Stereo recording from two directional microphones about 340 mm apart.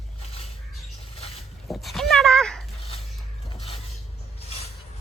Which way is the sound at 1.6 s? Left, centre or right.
Centre.